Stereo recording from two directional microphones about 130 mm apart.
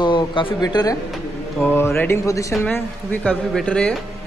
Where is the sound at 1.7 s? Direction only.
15° left (ahead or behind).